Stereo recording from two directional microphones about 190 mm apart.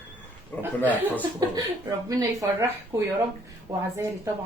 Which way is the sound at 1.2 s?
20° right (ahead or behind).